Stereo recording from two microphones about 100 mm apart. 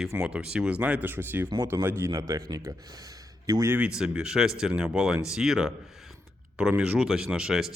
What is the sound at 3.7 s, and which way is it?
Speech, 15° right (ahead or behind).